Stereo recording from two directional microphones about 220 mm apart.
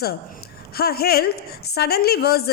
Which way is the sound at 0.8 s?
45° left (ahead or behind).